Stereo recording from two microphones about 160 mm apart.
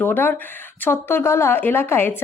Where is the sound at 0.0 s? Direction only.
15° left (ahead or behind).